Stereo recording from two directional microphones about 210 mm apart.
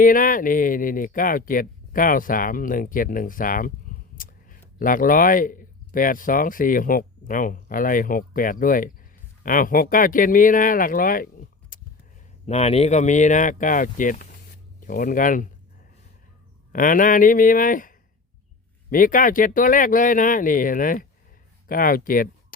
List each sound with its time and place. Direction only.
0.0 s speech: 40° left (ahead or behind)
11.7 s a sound: 40° left (ahead or behind)
12.5 s speech: 30° left (ahead or behind)
16.7 s speech: 40° left (ahead or behind)